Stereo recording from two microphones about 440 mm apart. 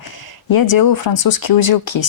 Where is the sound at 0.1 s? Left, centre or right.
Left.